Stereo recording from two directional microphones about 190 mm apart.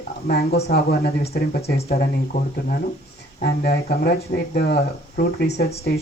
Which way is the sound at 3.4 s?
55° left (ahead or behind).